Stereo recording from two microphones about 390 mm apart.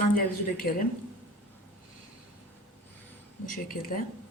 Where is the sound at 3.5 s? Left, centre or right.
Left.